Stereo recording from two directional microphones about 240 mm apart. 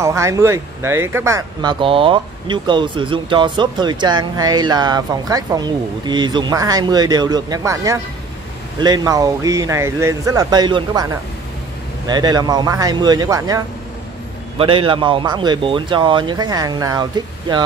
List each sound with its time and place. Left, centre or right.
0.0 s speech: centre
12.1 s speech: centre
14.6 s speech: right